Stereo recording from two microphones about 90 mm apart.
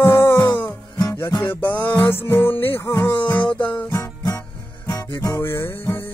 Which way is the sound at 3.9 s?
35° left (ahead or behind).